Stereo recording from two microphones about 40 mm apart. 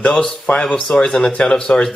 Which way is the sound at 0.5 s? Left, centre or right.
Left.